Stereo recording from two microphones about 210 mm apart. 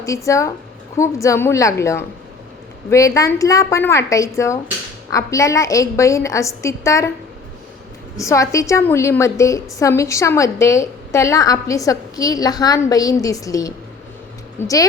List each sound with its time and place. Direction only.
0.0 s a woman's voice: 15° left (ahead or behind)
8.1 s a woman's voice: 15° left (ahead or behind)